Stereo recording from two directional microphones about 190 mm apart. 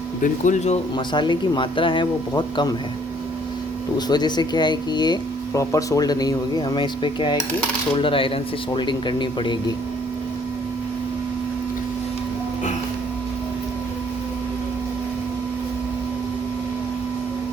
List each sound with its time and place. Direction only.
0.2 s speech: 40° left (ahead or behind)
1.1 s speech: 25° left (ahead or behind)
3.9 s speech: 20° left (ahead or behind)